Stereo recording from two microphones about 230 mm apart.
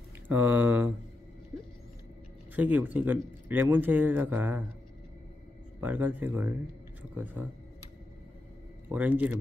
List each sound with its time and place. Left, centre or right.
0.3 s speech: centre
2.5 s speech: centre
5.8 s speech: centre
8.8 s speech: centre